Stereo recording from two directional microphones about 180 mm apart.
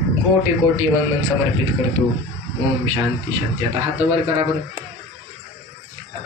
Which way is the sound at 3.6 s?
35° right (ahead or behind).